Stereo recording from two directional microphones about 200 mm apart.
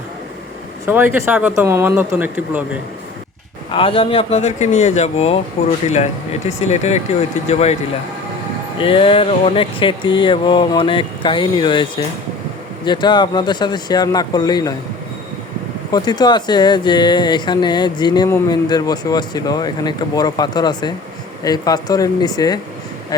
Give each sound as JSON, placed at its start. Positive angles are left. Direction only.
{"t": 0.9, "sound": "speech", "side_deg": -10}
{"t": 3.7, "sound": "a man's voice", "side_deg": 25}
{"t": 6.6, "sound": "a man's voice", "side_deg": 35}
{"t": 8.8, "sound": "speech", "side_deg": 25}
{"t": 15.9, "sound": "speech", "side_deg": 20}